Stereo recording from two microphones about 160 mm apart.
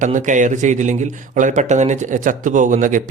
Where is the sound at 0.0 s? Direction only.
50° right (ahead or behind).